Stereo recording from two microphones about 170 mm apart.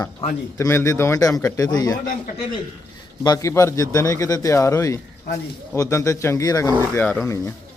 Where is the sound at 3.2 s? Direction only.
20° left (ahead or behind).